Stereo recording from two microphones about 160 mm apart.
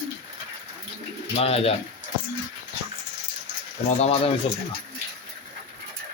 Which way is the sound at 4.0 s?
40° left (ahead or behind).